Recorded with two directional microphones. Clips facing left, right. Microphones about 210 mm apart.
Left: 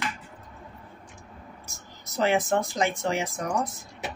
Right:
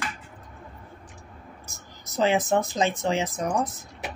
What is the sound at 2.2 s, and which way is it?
Speech, 15° right (ahead or behind).